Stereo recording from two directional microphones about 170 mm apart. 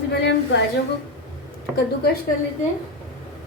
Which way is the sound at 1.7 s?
70° left (ahead or behind).